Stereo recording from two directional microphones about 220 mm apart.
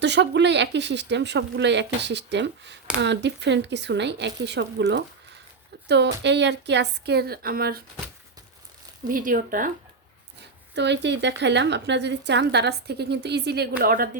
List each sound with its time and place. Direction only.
0.0 s speech: 50° right (ahead or behind)
9.0 s speech: 40° right (ahead or behind)
10.8 s speech: 50° right (ahead or behind)